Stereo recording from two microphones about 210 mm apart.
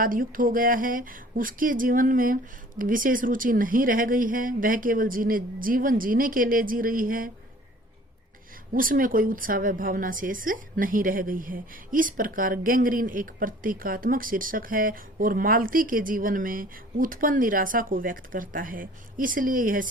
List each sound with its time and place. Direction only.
0.0 s a woman's voice: 40° right (ahead or behind)
8.7 s a woman's voice: 40° right (ahead or behind)